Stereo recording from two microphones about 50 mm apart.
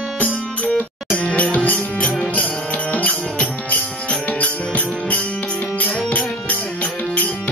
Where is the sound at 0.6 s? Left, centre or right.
Left.